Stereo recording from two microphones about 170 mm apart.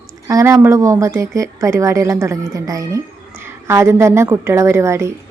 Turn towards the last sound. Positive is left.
turn(degrees=-15)  # may be behind; listen again after turning